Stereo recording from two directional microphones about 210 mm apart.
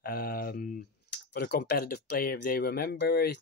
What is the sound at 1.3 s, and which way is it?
Speech, 50° left (ahead or behind).